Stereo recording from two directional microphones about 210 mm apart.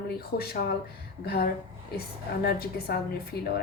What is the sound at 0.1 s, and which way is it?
A woman's voice, 45° left (ahead or behind).